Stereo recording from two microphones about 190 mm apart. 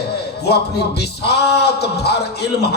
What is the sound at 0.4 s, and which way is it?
Speech, 60° left (ahead or behind).